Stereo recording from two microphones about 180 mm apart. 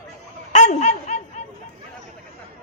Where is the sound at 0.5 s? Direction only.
40° left (ahead or behind).